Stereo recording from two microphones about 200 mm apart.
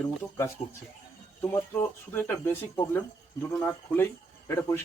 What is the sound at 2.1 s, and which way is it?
Speech, 10° left (ahead or behind).